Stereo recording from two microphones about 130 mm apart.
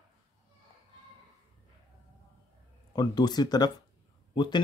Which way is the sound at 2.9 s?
30° left (ahead or behind).